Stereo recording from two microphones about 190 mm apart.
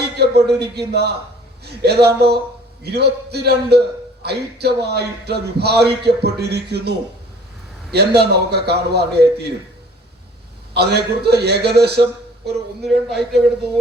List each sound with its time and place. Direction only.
0.2 s a sound: 60° right (ahead or behind)
0.6 s a man's voice: 60° right (ahead or behind)
10.8 s a man's voice: 60° right (ahead or behind)
12.8 s speech: centre (ahead or behind)